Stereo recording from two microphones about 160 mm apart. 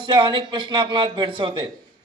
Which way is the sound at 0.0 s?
30° right (ahead or behind).